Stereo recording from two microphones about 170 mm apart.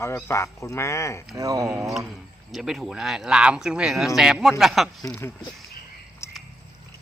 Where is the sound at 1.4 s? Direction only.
20° right (ahead or behind).